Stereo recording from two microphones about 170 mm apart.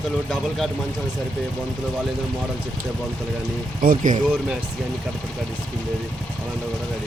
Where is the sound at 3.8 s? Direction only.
55° right (ahead or behind).